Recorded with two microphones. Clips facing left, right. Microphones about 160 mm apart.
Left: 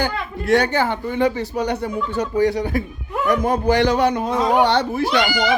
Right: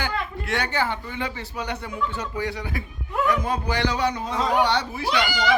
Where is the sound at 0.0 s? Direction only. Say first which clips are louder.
Left 5 dB; 40° left (ahead or behind).